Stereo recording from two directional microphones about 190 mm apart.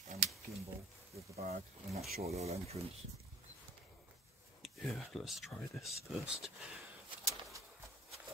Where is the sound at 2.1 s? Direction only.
35° right (ahead or behind).